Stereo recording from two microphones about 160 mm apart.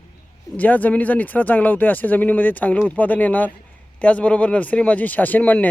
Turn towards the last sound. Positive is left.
turn(degrees=10)  # may be behind; listen again after turning